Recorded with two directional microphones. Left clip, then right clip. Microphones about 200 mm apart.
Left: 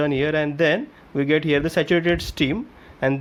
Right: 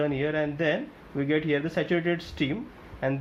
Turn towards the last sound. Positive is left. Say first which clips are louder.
# left 7 dB
turn(degrees=55)  # may be behind; listen again after turning